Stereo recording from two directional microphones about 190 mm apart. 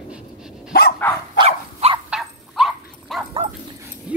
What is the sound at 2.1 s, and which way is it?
Dog, centre (ahead or behind).